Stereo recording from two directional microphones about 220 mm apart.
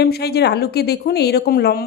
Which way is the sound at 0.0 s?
45° left (ahead or behind).